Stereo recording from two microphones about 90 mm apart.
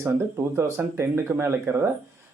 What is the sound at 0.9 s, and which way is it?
Speech, 30° right (ahead or behind).